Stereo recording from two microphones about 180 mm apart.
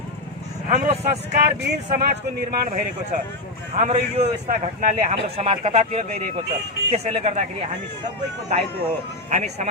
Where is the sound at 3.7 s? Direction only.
40° right (ahead or behind).